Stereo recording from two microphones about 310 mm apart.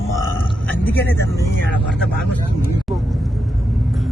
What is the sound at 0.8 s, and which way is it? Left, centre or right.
Speech, centre.